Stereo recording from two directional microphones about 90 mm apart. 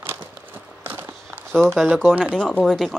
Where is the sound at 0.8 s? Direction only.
25° right (ahead or behind).